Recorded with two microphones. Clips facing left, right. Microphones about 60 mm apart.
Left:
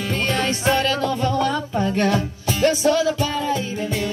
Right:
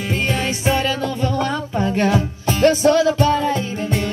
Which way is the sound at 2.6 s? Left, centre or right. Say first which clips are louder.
Right 4 dB; right.